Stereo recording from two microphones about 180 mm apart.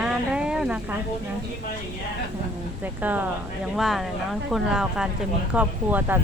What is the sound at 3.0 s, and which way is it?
A woman's voice, 10° right (ahead or behind).